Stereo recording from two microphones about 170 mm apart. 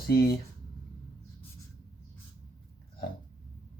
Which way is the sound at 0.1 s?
65° left (ahead or behind).